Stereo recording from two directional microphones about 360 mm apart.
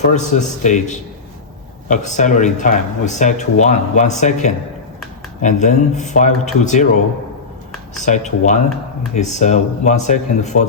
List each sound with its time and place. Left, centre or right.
0.1 s speech: centre
8.0 s speech: centre